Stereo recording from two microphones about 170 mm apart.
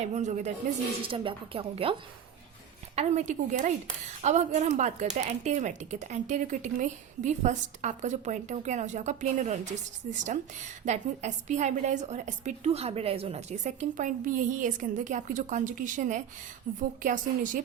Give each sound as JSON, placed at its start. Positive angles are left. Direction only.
{"t": 0.0, "sound": "a woman's voice", "side_deg": -45}
{"t": 1.0, "sound": "a woman's voice", "side_deg": -30}